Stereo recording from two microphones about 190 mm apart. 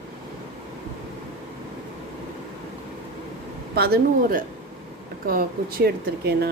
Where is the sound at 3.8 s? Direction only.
55° right (ahead or behind).